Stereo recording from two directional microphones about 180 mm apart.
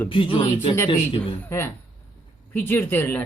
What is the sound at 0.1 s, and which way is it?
Speech, 30° left (ahead or behind).